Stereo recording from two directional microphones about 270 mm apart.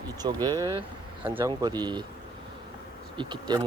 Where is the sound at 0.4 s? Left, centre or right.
Centre.